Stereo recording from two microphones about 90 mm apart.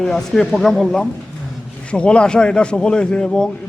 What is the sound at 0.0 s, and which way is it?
A man's voice, 5° left (ahead or behind).